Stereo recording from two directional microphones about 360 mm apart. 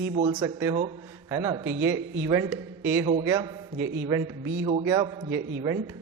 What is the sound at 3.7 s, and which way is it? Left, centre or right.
Speech, right.